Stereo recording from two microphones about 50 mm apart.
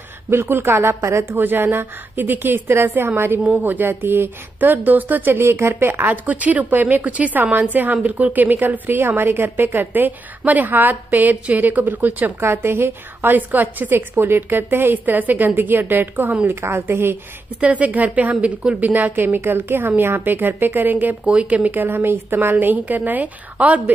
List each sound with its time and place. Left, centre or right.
0.3 s a woman's voice: right
1.4 s a woman's voice: right
3.4 s a woman's voice: right
12.4 s a woman's voice: right
13.3 s a woman's voice: right
17.6 s a woman's voice: right